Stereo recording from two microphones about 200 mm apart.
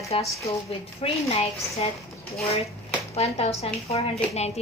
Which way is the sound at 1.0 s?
30° left (ahead or behind).